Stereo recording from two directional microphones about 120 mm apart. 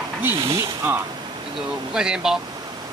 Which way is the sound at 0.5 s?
20° right (ahead or behind).